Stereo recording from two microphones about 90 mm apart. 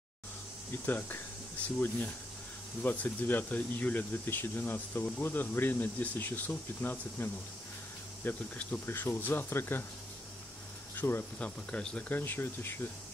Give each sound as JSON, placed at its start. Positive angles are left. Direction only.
{"t": 0.8, "sound": "speech", "side_deg": 20}
{"t": 2.8, "sound": "speech", "side_deg": 20}
{"t": 11.0, "sound": "speech", "side_deg": 25}
{"t": 11.3, "sound": "speech", "side_deg": 15}
{"t": 12.2, "sound": "speech", "side_deg": 25}